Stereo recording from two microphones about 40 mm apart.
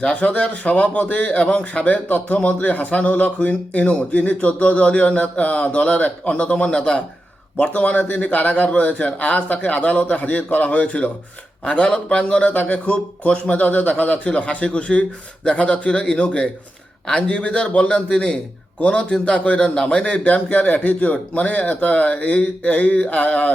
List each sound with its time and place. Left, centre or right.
0.0 s a man's voice: left
7.5 s a man's voice: left
12.5 s a man's voice: left